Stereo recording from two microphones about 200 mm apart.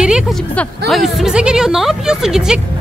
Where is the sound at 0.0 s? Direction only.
5° right (ahead or behind).